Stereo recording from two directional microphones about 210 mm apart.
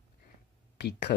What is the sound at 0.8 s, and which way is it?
Speech, 50° left (ahead or behind).